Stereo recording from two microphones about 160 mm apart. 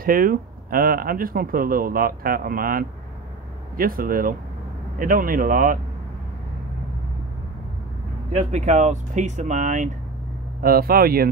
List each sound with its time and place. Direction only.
0.0 s speech: 65° right (ahead or behind)
8.3 s speech: 45° right (ahead or behind)
10.6 s speech: 70° right (ahead or behind)